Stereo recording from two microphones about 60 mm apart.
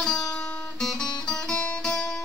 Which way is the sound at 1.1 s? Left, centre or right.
Centre.